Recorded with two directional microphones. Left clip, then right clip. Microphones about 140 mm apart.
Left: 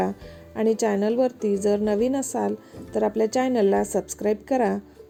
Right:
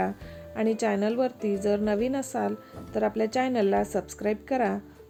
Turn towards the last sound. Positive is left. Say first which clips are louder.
# left 4 dB
turn(degrees=25)  # may be behind; listen again after turning